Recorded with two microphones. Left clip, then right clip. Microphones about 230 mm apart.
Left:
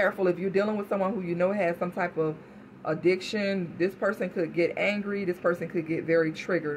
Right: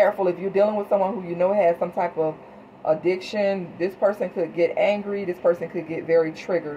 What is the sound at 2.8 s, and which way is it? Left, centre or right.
Speech, left.